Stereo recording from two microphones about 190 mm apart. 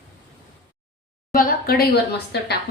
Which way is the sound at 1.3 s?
50° left (ahead or behind).